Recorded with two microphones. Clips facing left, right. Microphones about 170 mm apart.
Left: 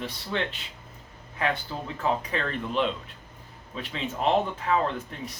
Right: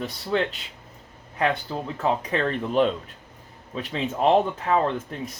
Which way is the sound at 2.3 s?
45° right (ahead or behind).